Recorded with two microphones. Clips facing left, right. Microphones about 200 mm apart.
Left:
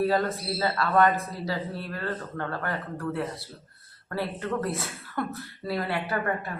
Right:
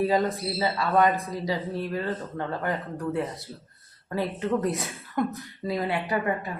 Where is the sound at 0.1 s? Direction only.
15° right (ahead or behind).